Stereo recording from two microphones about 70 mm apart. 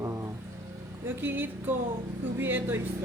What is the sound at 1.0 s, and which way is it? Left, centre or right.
Speech, right.